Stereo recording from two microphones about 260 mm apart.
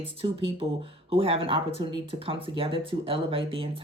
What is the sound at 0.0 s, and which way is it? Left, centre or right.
Speech, right.